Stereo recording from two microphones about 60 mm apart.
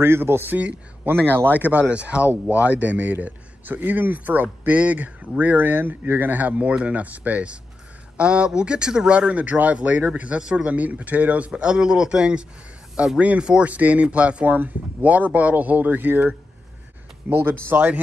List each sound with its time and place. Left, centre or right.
0.0 s speech: right
0.6 s speech: right
17.4 s speech: right